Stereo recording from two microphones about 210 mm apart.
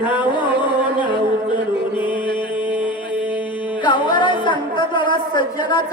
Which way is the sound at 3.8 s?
20° left (ahead or behind).